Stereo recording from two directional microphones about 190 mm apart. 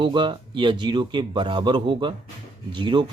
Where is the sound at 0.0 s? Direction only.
25° right (ahead or behind).